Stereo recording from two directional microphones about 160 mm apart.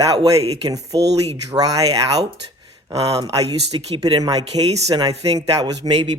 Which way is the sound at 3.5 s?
30° right (ahead or behind).